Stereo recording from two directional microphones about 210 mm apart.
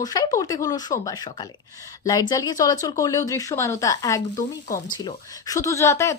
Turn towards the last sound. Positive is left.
turn(degrees=15)  # may be behind; listen again after turning